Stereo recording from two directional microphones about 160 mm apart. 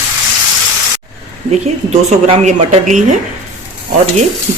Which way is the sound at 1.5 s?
45° right (ahead or behind).